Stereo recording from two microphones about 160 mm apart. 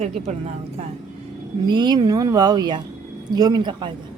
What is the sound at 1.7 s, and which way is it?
Female singing, 30° right (ahead or behind).